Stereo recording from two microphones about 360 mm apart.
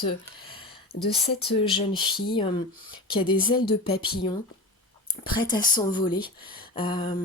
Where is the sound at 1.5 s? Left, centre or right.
Centre.